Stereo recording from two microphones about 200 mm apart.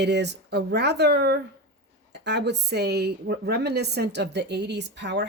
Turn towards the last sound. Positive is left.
turn(degrees=-60)  # may be behind; listen again after turning